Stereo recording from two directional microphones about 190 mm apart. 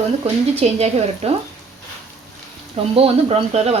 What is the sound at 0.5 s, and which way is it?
Speech, 35° right (ahead or behind).